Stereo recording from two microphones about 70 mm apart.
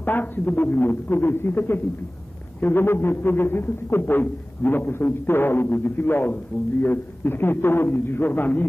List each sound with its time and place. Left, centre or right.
0.0 s a man's voice: left